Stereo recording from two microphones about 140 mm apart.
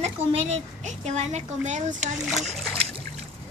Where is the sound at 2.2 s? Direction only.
Centre (ahead or behind).